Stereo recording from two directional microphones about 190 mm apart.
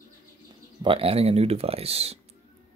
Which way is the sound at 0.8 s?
30° right (ahead or behind).